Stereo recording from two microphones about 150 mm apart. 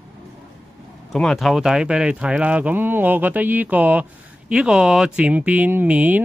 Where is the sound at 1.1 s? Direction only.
Centre (ahead or behind).